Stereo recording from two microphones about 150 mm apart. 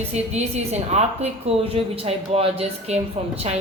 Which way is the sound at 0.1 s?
45° right (ahead or behind).